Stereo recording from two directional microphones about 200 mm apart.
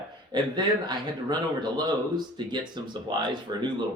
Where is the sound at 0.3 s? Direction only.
20° right (ahead or behind).